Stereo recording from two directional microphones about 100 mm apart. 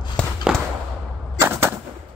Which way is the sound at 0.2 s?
10° left (ahead or behind).